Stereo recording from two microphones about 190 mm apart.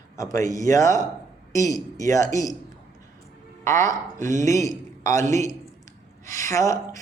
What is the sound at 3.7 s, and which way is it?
A man's voice, 15° left (ahead or behind).